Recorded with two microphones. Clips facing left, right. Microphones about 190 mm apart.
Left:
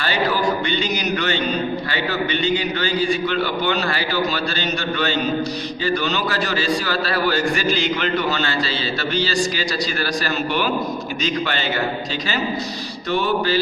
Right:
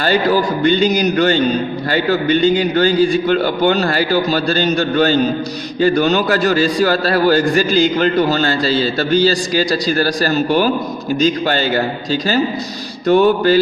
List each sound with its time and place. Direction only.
0.6 s a man's voice: 45° right (ahead or behind)
13.1 s a man's voice: 50° right (ahead or behind)